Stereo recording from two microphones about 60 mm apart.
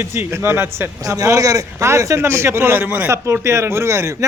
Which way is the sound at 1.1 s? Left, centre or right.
Right.